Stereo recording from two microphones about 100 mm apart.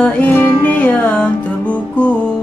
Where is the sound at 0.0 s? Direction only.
15° left (ahead or behind).